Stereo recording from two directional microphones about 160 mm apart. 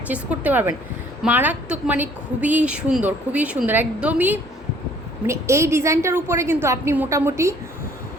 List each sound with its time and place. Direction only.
0.1 s a woman's voice: 10° right (ahead or behind)